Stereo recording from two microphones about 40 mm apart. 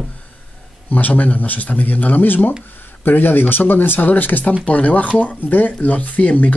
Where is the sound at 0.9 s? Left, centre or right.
Left.